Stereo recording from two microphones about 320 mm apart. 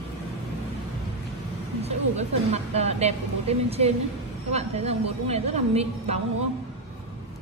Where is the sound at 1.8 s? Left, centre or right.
Centre.